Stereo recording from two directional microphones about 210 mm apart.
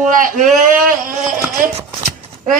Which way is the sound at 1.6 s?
30° right (ahead or behind).